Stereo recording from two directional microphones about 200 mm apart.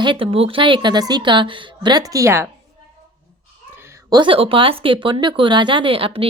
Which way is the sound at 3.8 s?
15° right (ahead or behind).